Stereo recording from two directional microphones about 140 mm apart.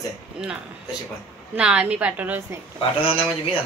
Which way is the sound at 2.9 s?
40° left (ahead or behind).